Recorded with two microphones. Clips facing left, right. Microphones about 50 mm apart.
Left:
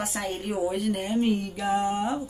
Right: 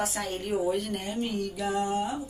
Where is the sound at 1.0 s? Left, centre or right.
Left.